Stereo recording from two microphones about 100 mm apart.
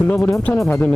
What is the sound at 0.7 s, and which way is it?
Speech, 20° left (ahead or behind).